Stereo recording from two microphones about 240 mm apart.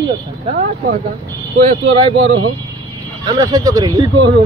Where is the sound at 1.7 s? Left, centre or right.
Right.